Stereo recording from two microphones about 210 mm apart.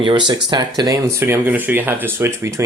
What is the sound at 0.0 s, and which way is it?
Speech, 25° right (ahead or behind).